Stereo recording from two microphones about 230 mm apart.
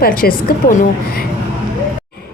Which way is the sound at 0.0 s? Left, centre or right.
Left.